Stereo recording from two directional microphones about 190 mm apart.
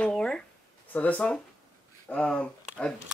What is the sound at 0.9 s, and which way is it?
Speech, 5° left (ahead or behind).